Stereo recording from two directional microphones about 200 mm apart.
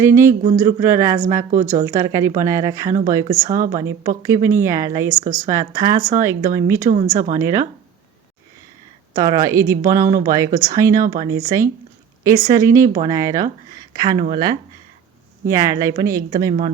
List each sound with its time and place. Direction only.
0.0 s speech: 15° right (ahead or behind)
7.2 s speech: 35° right (ahead or behind)
9.1 s speech: 15° right (ahead or behind)